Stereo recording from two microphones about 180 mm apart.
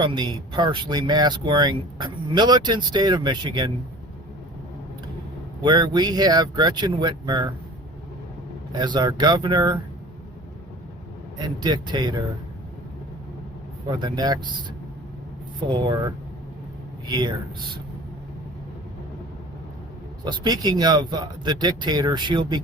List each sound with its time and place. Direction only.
0.0 s speech: 25° right (ahead or behind)
5.6 s speech: 25° right (ahead or behind)
8.7 s speech: 25° right (ahead or behind)
11.3 s speech: 25° right (ahead or behind)
13.9 s speech: 25° right (ahead or behind)
15.7 s speech: 25° right (ahead or behind)
20.2 s speech: 20° right (ahead or behind)